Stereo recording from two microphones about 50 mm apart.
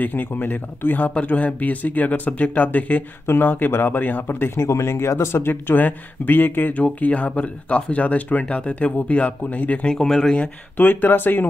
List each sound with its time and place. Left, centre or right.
0.0 s speech: left
3.3 s speech: left
4.6 s speech: left
6.8 s speech: left
9.8 s speech: centre
10.8 s speech: left